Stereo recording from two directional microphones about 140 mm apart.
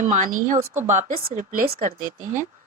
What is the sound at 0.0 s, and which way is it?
A woman's voice, 65° right (ahead or behind).